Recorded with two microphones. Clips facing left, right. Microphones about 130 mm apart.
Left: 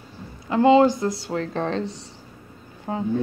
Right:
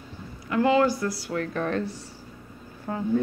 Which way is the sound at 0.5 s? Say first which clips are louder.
Left 5 dB; 25° left (ahead or behind).